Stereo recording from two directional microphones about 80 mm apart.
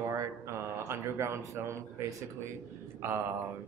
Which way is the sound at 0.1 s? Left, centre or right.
Right.